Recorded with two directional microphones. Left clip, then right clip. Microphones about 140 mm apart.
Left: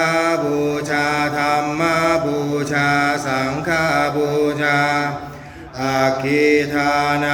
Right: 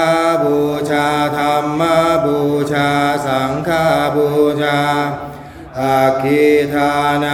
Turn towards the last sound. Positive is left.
turn(degrees=-20)  # may be behind; listen again after turning